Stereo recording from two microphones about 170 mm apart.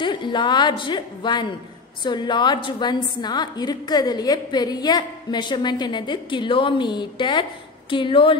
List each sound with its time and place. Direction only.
0.0 s a woman's voice: 30° left (ahead or behind)